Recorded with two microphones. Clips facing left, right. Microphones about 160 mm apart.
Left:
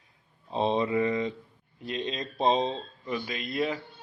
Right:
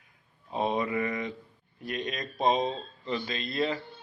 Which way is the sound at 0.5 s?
25° left (ahead or behind).